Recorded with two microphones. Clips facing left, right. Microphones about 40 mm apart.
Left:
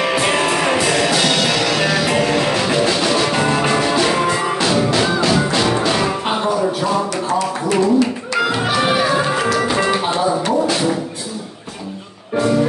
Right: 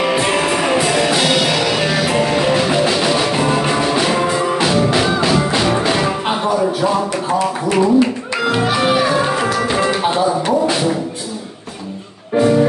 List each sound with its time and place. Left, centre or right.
0.0 s music: centre
4.7 s music: centre
7.7 s speech: centre
8.5 s music: centre
10.1 s music: centre